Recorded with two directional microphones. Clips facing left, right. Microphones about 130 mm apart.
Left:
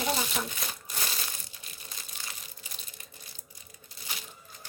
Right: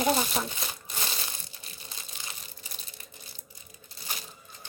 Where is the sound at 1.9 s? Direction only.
20° right (ahead or behind).